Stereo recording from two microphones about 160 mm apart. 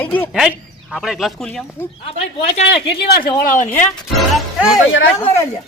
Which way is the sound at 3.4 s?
55° left (ahead or behind).